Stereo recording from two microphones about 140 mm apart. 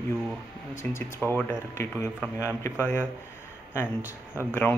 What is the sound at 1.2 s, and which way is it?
Speech, 20° left (ahead or behind).